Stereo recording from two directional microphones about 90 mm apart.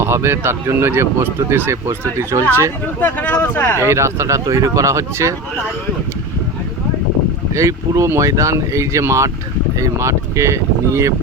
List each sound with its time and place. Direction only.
0.0 s speech: 25° right (ahead or behind)
3.0 s speech: 20° left (ahead or behind)
3.8 s speech: 30° right (ahead or behind)
7.5 s speech: 35° right (ahead or behind)